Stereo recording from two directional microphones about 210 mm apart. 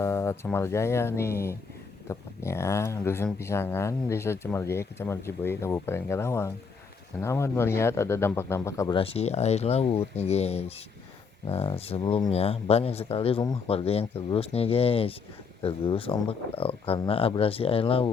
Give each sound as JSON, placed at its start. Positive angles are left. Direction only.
{"t": 0.0, "sound": "speech", "side_deg": 10}
{"t": 9.0, "sound": "speech", "side_deg": 30}